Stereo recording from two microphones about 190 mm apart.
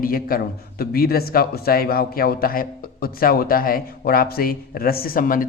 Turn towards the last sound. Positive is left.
turn(degrees=45)  # may be behind; listen again after turning